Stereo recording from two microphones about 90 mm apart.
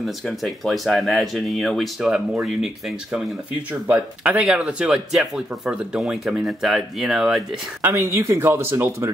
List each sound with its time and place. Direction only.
0.0 s speech: centre (ahead or behind)
7.8 s speech: 30° right (ahead or behind)